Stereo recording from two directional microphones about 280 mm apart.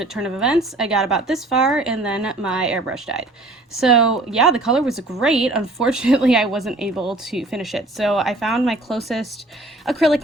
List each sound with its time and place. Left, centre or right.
0.0 s speech: centre